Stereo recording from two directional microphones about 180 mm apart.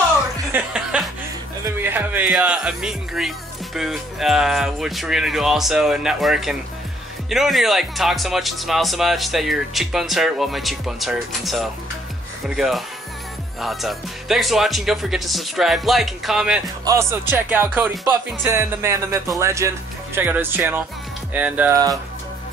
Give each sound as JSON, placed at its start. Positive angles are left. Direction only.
{"t": 0.5, "sound": "music", "side_deg": -5}
{"t": 1.6, "sound": "speech", "side_deg": -10}
{"t": 16.8, "sound": "music", "side_deg": -15}